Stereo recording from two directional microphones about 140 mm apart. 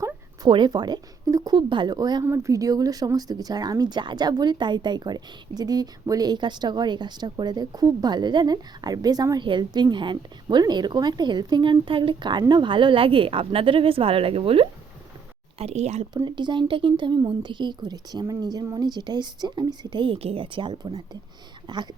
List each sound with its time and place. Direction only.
0.4 s speech: 35° right (ahead or behind); by 16.0 s 55° right (ahead or behind)
16.1 s speech: 30° right (ahead or behind)